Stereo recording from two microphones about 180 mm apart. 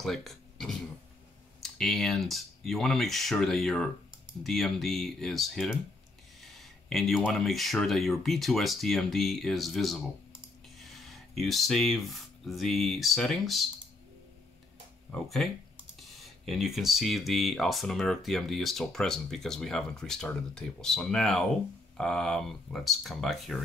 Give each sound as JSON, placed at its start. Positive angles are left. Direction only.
{"t": 0.0, "sound": "speech", "side_deg": 0}
{"t": 15.0, "sound": "speech", "side_deg": 0}